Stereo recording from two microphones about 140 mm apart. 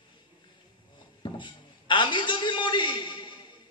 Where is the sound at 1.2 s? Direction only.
35° left (ahead or behind).